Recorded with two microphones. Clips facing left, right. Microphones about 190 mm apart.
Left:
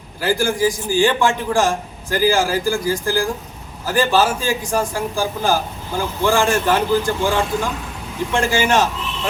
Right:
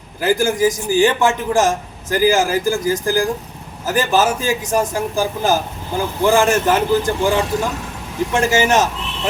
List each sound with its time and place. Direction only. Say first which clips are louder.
0.2 s a man's voice: right 2 dB; 20° right (ahead or behind)